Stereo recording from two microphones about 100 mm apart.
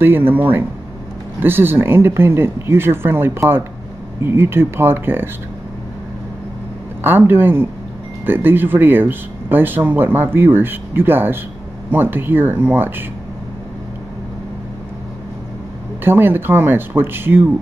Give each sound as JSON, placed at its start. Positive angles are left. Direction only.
{"t": 0.0, "sound": "speech", "side_deg": -20}
{"t": 7.0, "sound": "speech", "side_deg": -20}
{"t": 16.0, "sound": "speech", "side_deg": -20}